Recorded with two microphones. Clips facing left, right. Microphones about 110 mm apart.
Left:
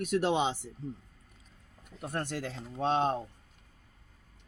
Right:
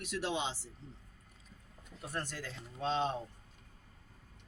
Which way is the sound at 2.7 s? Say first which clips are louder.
Left 5 dB; 55° left (ahead or behind).